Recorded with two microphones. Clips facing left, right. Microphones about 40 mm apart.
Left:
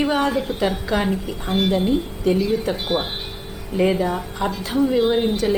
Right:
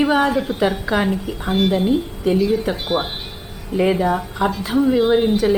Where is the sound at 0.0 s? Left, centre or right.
Centre.